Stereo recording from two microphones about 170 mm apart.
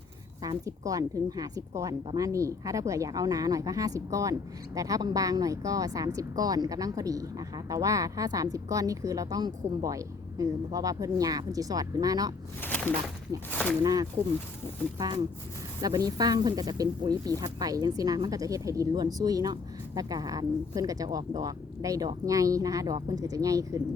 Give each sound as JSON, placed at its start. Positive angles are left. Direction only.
{"t": 0.4, "sound": "speech", "side_deg": -20}
{"t": 12.6, "sound": "a sound", "side_deg": 10}
{"t": 13.5, "sound": "speech", "side_deg": 10}
{"t": 13.8, "sound": "speech", "side_deg": -20}